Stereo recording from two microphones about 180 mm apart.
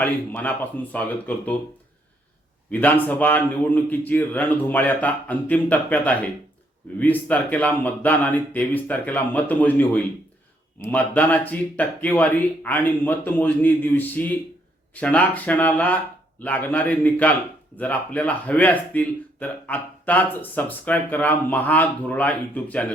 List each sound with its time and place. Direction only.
0.0 s speech: 10° left (ahead or behind)
2.6 s speech: 10° left (ahead or behind)